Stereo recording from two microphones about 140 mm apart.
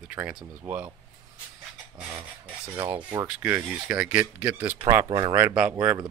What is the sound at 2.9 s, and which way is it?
Speech, 25° right (ahead or behind).